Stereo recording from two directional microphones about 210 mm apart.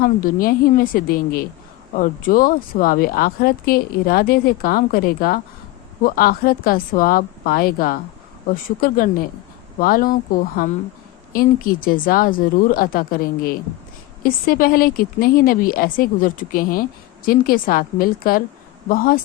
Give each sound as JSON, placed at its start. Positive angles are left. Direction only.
{"t": 0.0, "sound": "speech", "side_deg": 40}